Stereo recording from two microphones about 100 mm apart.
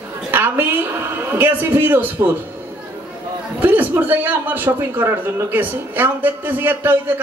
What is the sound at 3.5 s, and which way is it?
A man's voice, 20° right (ahead or behind).